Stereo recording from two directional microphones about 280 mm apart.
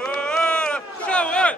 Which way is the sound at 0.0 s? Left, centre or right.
Centre.